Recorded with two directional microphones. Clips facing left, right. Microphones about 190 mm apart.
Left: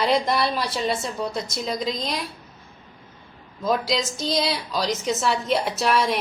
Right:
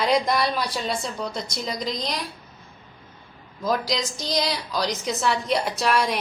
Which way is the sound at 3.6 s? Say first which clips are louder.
Left 2 dB; centre (ahead or behind).